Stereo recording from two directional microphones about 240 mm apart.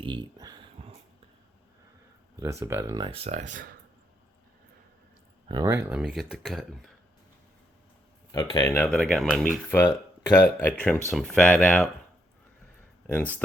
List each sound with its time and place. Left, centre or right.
0.0 s a sound: centre
2.4 s speech: centre; by 3.5 s right
5.5 s speech: centre
8.3 s speech: centre
13.1 s speech: centre